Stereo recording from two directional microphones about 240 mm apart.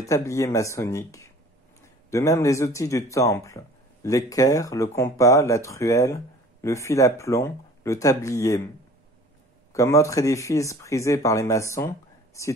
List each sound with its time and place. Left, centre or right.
0.0 s speech: centre
9.7 s speech: centre